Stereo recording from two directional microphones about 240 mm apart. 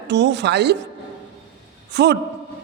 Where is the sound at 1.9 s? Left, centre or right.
Right.